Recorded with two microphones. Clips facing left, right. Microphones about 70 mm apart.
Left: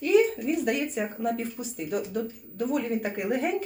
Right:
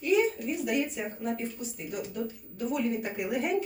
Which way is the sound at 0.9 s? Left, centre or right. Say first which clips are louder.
Left 5 dB; left.